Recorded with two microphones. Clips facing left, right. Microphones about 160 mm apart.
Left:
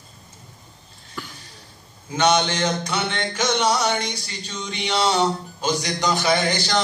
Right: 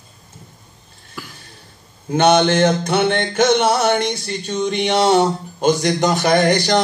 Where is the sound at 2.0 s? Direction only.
55° right (ahead or behind).